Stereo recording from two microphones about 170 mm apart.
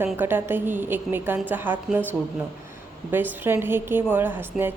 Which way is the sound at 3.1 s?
10° right (ahead or behind).